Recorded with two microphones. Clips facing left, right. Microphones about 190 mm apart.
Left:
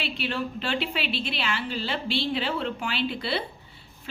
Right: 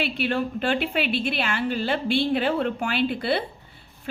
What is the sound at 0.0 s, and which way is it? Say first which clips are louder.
A woman's voice: right 5 dB; 55° right (ahead or behind).